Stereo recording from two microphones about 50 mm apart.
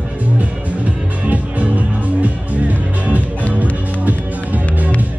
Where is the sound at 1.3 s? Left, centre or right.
Right.